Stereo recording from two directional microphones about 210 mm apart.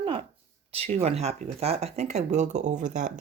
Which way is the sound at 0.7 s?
30° right (ahead or behind).